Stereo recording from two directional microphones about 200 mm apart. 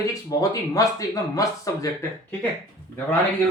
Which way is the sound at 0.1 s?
15° left (ahead or behind).